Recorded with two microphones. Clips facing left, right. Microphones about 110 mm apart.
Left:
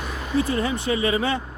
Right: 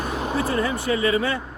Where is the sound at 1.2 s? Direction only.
20° left (ahead or behind).